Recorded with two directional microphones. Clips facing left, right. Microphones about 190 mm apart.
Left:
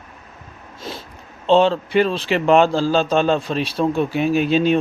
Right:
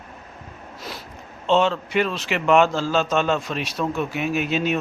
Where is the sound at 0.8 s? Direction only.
25° left (ahead or behind).